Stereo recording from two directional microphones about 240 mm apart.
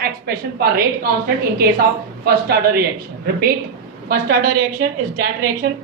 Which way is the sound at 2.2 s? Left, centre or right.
Right.